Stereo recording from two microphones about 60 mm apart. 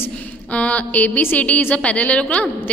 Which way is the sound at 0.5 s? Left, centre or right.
Left.